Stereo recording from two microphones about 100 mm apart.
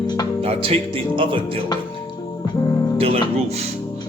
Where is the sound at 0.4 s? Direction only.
70° right (ahead or behind).